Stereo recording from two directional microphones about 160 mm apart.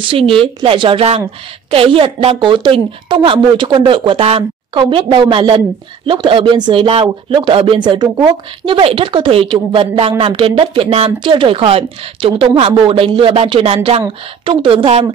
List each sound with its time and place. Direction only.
0.0 s speech: 35° right (ahead or behind)